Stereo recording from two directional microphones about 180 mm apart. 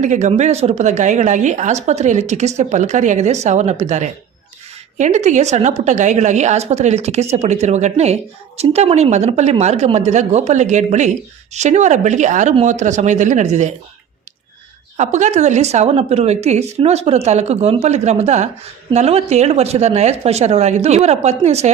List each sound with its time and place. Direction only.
0.0 s a woman's voice: 40° right (ahead or behind)
14.9 s a woman's voice: 40° right (ahead or behind)